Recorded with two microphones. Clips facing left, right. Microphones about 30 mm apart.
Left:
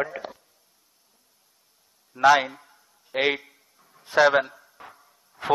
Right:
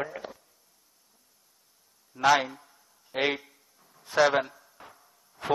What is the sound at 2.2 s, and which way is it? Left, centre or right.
Speech, centre.